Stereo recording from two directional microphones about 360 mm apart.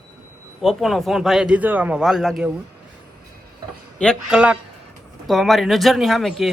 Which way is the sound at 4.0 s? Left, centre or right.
Centre.